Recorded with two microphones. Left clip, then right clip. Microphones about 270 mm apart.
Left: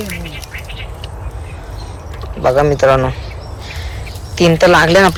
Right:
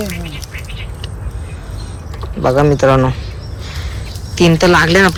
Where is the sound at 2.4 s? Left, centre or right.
Centre.